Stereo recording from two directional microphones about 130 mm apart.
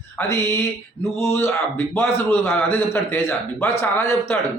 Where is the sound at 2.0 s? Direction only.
20° left (ahead or behind).